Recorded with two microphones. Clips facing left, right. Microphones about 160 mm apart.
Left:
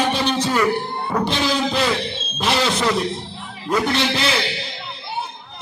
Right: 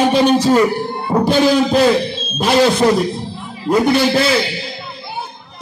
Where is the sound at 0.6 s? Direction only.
30° right (ahead or behind).